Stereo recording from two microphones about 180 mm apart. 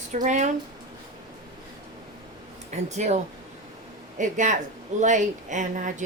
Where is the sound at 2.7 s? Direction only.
40° right (ahead or behind).